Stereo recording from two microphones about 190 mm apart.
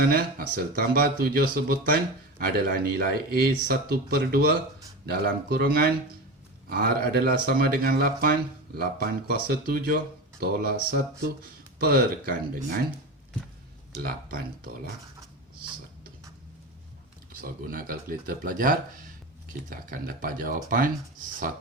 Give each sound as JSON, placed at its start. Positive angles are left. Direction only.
{"t": 0.1, "sound": "speech", "side_deg": -50}
{"t": 14.0, "sound": "speech", "side_deg": -50}
{"t": 17.4, "sound": "speech", "side_deg": -50}